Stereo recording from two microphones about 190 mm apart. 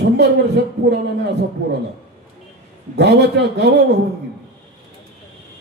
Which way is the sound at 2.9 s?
60° right (ahead or behind).